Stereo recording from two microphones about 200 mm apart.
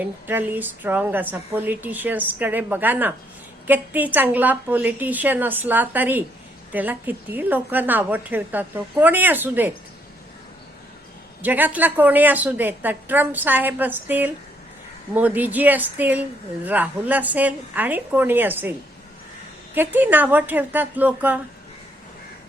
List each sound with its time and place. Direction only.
0.0 s a woman's voice: 10° right (ahead or behind)
11.4 s a woman's voice: 10° right (ahead or behind)
19.7 s a woman's voice: 10° right (ahead or behind)